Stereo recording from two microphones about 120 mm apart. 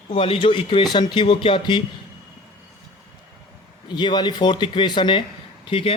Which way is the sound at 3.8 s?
40° left (ahead or behind).